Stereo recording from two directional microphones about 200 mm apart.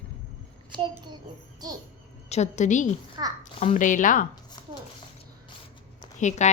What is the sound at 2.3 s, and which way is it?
Speech, 35° left (ahead or behind).